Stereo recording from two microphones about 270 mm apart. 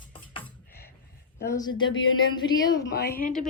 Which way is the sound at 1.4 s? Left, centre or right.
Centre.